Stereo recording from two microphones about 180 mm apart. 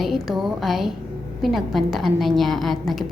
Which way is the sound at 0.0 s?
Centre (ahead or behind).